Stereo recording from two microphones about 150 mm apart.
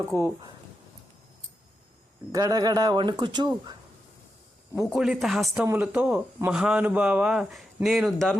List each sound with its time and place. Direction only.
0.1 s speech: 20° left (ahead or behind)
2.3 s speech: 25° right (ahead or behind)
4.9 s speech: 5° right (ahead or behind)
5.6 s speech: 10° right (ahead or behind)